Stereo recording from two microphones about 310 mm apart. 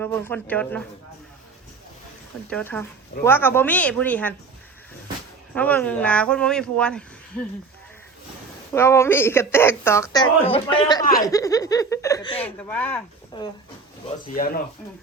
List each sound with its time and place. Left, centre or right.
0.0 s speech: centre
2.5 s speech: centre
5.5 s speech: centre
8.7 s a woman's voice: centre
14.3 s speech: left